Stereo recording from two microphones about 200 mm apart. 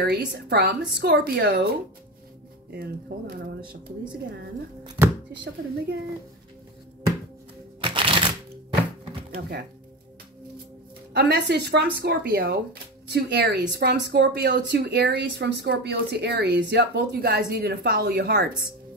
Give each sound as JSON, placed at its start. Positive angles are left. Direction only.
{"t": 0.0, "sound": "a woman's voice", "side_deg": -55}
{"t": 2.7, "sound": "a woman's voice", "side_deg": -50}
{"t": 5.3, "sound": "speech", "side_deg": -60}
{"t": 7.8, "sound": "typewriter", "side_deg": -25}
{"t": 11.1, "sound": "a woman's voice", "side_deg": -55}